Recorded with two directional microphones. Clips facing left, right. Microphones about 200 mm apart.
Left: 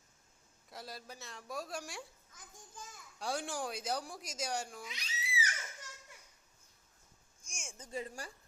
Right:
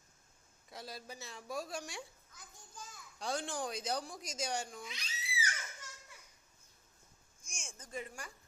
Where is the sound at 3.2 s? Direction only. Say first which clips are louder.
Even; 10° left (ahead or behind).